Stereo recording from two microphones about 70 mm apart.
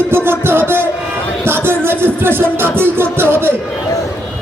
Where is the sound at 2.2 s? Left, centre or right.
Right.